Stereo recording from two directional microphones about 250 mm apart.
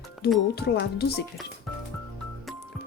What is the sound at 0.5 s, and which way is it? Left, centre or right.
Speech, left.